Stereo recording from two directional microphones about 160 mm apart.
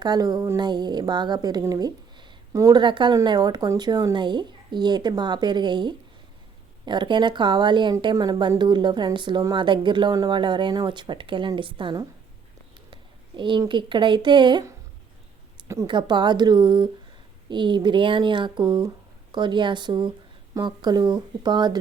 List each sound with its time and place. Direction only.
0.0 s a woman's voice: 25° right (ahead or behind)